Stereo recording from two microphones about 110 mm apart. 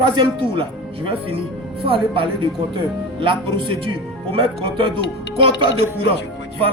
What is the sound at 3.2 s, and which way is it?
Speech, 50° right (ahead or behind).